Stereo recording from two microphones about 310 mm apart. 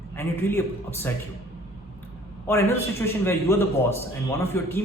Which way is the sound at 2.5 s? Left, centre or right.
Centre.